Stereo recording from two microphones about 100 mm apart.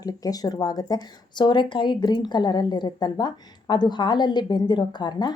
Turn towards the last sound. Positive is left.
turn(degrees=45)  # may be behind; listen again after turning